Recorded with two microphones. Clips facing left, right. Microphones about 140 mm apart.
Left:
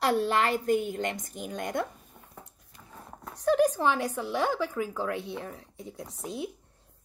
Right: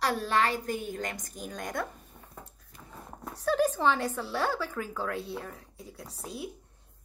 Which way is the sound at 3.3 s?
15° left (ahead or behind).